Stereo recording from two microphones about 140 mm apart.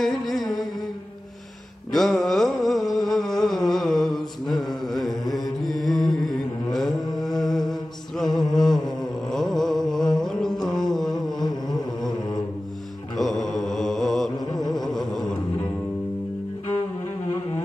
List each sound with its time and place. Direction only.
0.0 s music: centre (ahead or behind)
1.9 s mantra: centre (ahead or behind)
7.2 s music: centre (ahead or behind)
8.2 s a sound: centre (ahead or behind)
10.1 s music: centre (ahead or behind)
13.2 s mantra: centre (ahead or behind)
14.5 s music: 30° left (ahead or behind)
15.0 s music: centre (ahead or behind)